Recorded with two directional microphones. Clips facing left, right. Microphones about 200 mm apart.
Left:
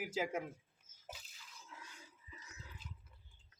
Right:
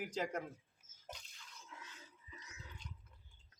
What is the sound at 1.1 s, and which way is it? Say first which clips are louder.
Drip: even; 5° left (ahead or behind).